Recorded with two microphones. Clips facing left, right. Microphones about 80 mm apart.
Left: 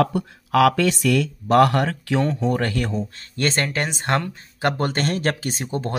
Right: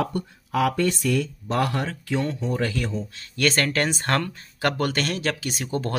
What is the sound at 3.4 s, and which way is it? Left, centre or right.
Speech, left.